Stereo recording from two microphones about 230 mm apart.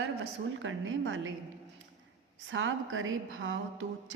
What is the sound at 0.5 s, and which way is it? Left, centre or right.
Speech, right.